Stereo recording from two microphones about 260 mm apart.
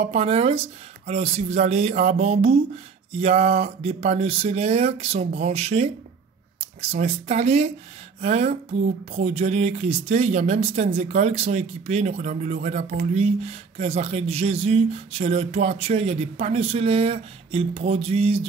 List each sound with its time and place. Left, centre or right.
0.0 s speech: right